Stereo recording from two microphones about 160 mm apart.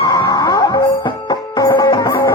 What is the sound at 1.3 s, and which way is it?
Music, 25° left (ahead or behind).